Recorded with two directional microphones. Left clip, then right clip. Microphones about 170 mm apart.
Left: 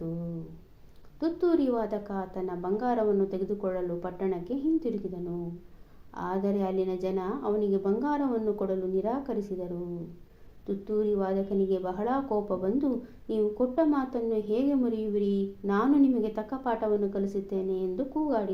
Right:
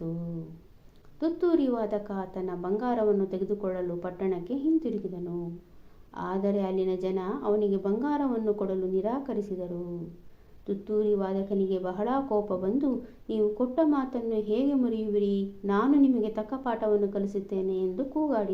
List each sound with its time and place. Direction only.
1.2 s a woman's voice: 20° right (ahead or behind)
6.1 s a woman's voice: 20° right (ahead or behind)
10.8 s a woman's voice: 20° right (ahead or behind)